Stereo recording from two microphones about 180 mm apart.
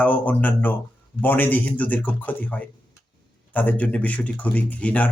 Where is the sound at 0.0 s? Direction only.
10° left (ahead or behind).